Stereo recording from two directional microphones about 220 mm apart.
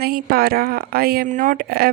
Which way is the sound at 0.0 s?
45° right (ahead or behind).